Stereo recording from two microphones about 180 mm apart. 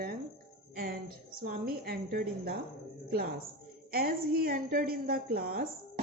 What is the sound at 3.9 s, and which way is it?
A woman's voice, 55° right (ahead or behind).